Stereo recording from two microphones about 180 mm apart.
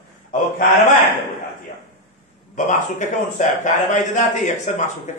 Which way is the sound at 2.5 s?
40° left (ahead or behind).